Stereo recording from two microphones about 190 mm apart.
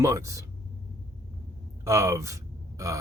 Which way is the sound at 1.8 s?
15° right (ahead or behind).